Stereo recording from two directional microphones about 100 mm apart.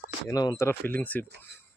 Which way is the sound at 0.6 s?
20° left (ahead or behind).